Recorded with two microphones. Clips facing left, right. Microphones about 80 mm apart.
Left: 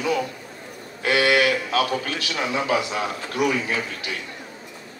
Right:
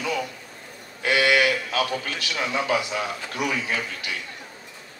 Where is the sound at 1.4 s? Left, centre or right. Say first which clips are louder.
Left 2 dB; centre.